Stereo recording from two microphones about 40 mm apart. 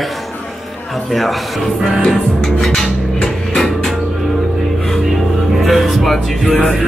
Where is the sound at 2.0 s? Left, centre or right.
Centre.